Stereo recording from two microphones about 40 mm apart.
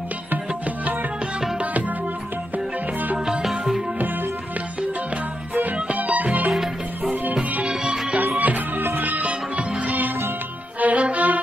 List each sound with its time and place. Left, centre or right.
1.6 s music: right
3.3 s music: centre
5.9 s music: right
6.5 s music: centre
8.2 s music: right
9.2 s music: right